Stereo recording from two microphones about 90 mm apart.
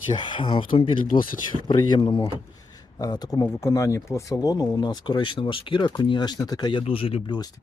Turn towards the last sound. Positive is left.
turn(degrees=80)